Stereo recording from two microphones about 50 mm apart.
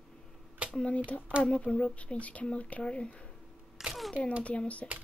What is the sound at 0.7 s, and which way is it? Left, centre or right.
Speech, left.